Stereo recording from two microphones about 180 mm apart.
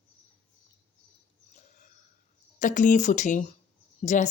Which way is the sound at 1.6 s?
45° left (ahead or behind).